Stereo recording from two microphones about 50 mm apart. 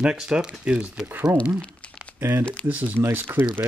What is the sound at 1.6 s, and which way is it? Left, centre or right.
Crumpling, left.